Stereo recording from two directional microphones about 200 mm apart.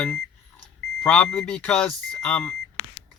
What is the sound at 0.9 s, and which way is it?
Speech, 5° left (ahead or behind).